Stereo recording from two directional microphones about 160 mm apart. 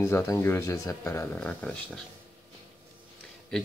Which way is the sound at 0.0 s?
15° left (ahead or behind).